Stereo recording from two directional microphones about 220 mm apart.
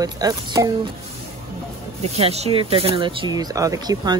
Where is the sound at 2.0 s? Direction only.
30° right (ahead or behind).